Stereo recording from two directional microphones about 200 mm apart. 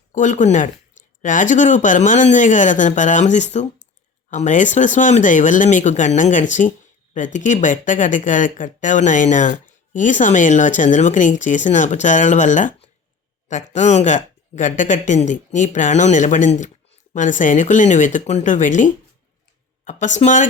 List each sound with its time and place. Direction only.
0.1 s speech: 40° left (ahead or behind)